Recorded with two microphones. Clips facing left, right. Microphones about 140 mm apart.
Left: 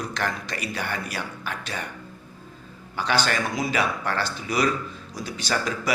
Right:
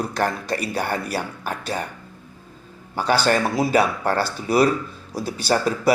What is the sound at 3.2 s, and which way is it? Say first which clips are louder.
Speech: right 6 dB; 35° right (ahead or behind).